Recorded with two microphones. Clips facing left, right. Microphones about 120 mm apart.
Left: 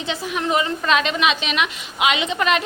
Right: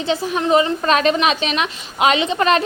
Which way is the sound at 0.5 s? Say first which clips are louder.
Right 4 dB; 35° right (ahead or behind).